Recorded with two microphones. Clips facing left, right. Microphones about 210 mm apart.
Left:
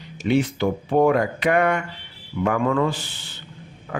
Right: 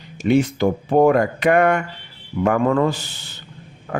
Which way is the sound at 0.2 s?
45° right (ahead or behind).